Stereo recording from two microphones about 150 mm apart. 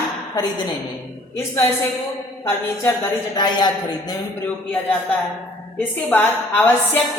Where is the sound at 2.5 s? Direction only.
15° left (ahead or behind).